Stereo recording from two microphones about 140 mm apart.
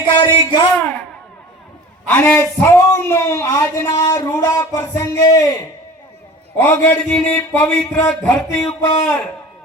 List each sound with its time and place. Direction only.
0.0 s a man's voice: 35° left (ahead or behind)
2.0 s speech: 15° left (ahead or behind)
6.6 s speech: 10° left (ahead or behind)